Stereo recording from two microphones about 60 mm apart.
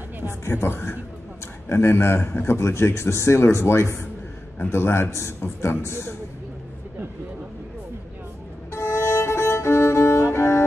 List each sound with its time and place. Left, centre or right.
0.3 s a man's voice: left
8.7 s violin: left
10.3 s music: left